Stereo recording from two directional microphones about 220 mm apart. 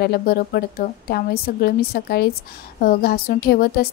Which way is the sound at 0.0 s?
45° left (ahead or behind).